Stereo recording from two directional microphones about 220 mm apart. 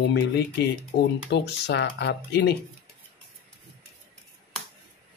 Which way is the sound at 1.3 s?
50° left (ahead or behind).